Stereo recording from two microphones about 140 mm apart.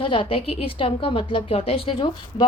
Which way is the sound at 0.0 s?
40° left (ahead or behind).